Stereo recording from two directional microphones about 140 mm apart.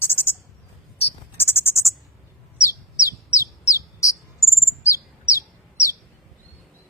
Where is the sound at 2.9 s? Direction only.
20° left (ahead or behind).